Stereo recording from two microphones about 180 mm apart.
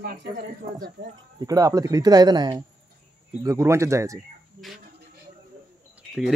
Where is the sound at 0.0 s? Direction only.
70° right (ahead or behind).